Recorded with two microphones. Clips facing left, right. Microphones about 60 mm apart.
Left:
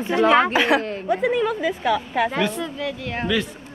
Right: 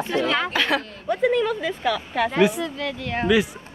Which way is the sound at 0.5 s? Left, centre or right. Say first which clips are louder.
Left 4 dB; centre.